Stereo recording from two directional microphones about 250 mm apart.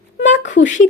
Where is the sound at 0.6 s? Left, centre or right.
Left.